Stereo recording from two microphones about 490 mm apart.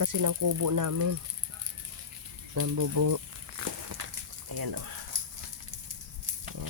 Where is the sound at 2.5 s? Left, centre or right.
Right.